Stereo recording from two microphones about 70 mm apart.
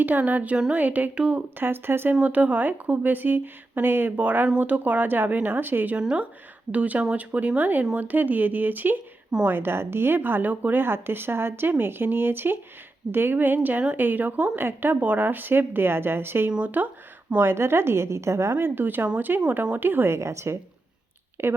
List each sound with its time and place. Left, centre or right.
0.0 s a woman's voice: right
1.5 s a woman's voice: right
2.1 s a woman's voice: right
6.0 s a woman's voice: centre; by 16.5 s right
16.5 s a woman's voice: centre
17.4 s a woman's voice: right
18.5 s a woman's voice: right